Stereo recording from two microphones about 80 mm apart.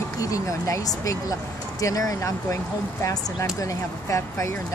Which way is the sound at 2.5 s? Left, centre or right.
Left.